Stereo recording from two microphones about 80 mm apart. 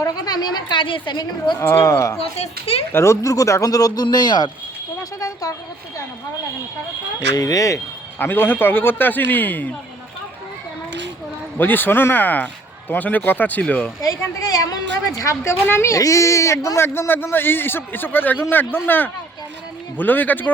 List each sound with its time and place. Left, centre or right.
0.0 s speech: left
1.5 s a woman's voice: left
4.0 s speech: left
5.2 s speech: left
7.3 s a man's voice: left
8.2 s speech: left
11.5 s speech: left
14.0 s a man's voice: left
15.2 s a woman's voice: left